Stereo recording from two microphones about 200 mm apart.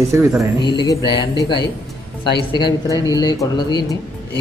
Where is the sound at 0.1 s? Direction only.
15° right (ahead or behind).